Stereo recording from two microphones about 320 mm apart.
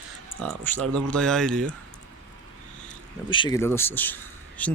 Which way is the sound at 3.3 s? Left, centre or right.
Centre.